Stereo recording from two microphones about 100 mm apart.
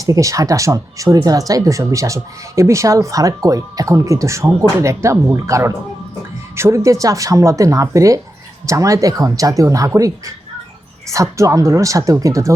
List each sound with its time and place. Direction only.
0.0 s speech: 35° right (ahead or behind)